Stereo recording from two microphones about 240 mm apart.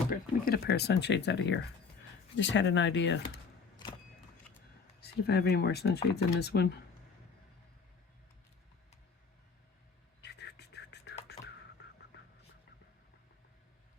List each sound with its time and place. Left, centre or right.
0.1 s speech: left
4.9 s speech: left
10.2 s whispering: left